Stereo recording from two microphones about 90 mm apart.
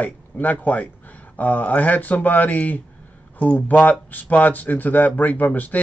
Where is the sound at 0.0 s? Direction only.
20° left (ahead or behind).